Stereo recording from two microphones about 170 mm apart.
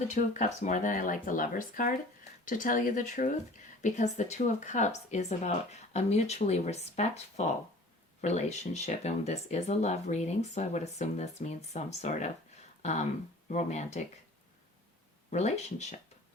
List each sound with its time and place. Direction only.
0.1 s speech: 45° left (ahead or behind)
15.3 s speech: 40° left (ahead or behind)